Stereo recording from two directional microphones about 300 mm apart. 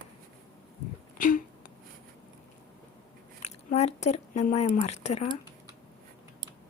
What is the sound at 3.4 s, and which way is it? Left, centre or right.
Squish, left.